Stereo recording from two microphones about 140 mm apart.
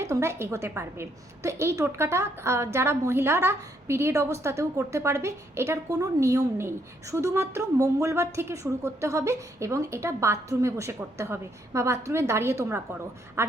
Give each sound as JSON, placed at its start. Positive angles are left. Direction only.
{"t": 0.0, "sound": "a woman's voice", "side_deg": -20}